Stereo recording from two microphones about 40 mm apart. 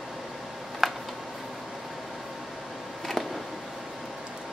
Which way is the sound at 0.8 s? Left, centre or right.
Centre.